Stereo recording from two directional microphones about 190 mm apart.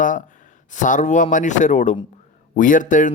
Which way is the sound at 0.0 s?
45° left (ahead or behind).